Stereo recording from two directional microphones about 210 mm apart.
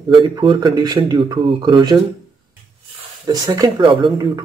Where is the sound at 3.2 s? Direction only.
20° right (ahead or behind).